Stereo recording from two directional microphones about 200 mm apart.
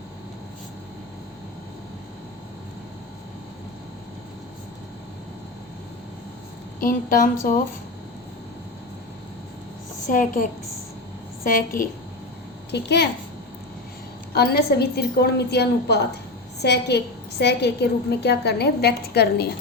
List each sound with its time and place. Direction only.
6.7 s a woman's voice: 45° left (ahead or behind)
10.1 s a woman's voice: 40° left (ahead or behind)
12.7 s a woman's voice: 55° left (ahead or behind)
14.3 s a woman's voice: 50° left (ahead or behind)